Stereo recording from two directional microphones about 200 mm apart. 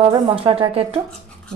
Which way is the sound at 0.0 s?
25° right (ahead or behind).